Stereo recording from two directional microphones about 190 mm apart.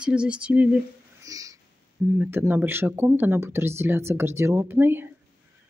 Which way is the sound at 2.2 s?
10° right (ahead or behind).